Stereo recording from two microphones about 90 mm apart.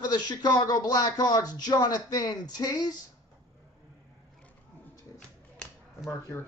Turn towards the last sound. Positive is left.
turn(degrees=25)  # may be behind; listen again after turning